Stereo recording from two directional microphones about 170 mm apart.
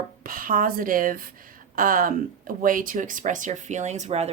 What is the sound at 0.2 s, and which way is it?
A woman's voice, 55° right (ahead or behind).